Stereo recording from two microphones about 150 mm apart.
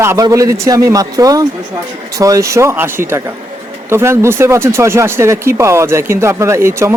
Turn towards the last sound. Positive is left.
turn(degrees=-20)  # may be behind; listen again after turning